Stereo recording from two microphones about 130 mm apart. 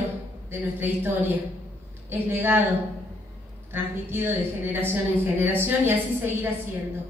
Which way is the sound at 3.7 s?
15° right (ahead or behind).